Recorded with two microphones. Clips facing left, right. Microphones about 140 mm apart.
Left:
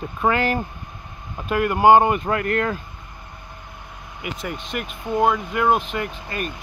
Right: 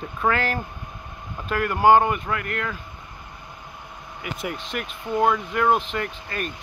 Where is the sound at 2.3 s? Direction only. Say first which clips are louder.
Left 6 dB; 35° left (ahead or behind).